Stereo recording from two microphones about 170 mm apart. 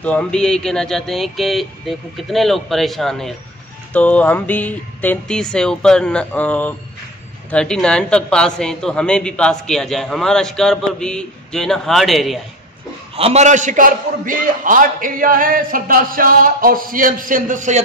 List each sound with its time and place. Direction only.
0.0 s a woman's voice: 5° left (ahead or behind)
13.1 s a man's voice: 35° right (ahead or behind)